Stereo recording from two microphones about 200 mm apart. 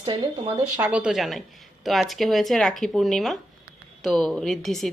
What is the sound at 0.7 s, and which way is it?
Speech, 10° right (ahead or behind).